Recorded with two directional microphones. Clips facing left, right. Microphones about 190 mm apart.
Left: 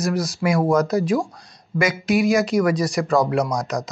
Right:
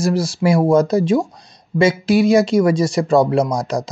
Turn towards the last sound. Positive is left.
turn(degrees=-30)  # may be behind; listen again after turning